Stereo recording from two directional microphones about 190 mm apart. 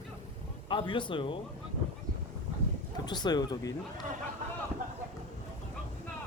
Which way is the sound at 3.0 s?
20° left (ahead or behind).